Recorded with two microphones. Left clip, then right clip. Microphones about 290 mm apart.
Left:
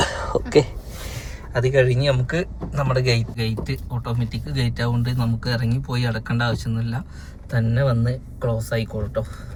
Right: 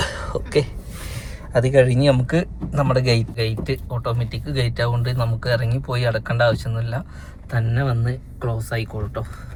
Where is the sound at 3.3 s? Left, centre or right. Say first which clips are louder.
Right 4 dB; centre.